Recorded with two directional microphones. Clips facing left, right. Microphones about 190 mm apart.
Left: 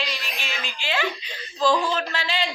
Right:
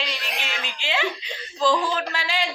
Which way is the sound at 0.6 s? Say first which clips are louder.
Left 1 dB; 20° right (ahead or behind).